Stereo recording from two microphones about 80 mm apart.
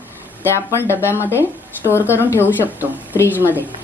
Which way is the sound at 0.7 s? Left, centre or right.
Left.